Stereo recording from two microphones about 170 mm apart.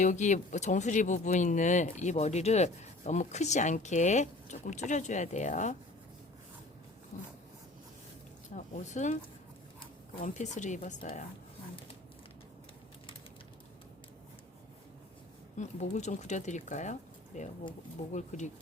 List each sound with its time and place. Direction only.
0.0 s speech: 45° left (ahead or behind)
8.5 s speech: 45° left (ahead or behind)
10.2 s speech: 45° left (ahead or behind)
15.5 s speech: 45° left (ahead or behind)